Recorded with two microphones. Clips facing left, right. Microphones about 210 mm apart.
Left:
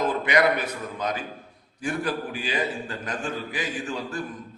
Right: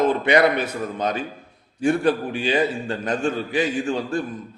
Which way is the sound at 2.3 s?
25° right (ahead or behind).